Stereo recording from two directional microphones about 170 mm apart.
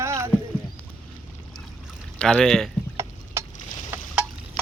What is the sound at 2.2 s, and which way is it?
Speech, 5° left (ahead or behind).